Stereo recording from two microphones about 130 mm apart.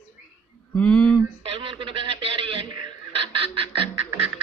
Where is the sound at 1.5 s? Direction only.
45° right (ahead or behind).